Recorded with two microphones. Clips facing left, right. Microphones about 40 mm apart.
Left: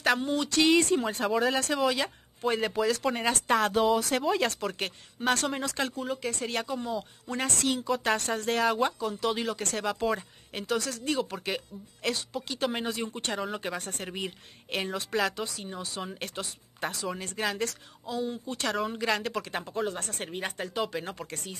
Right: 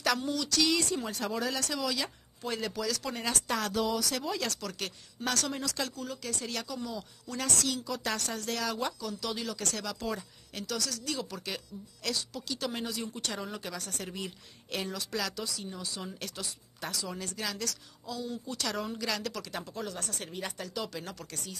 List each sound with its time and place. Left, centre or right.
0.0 s speech: left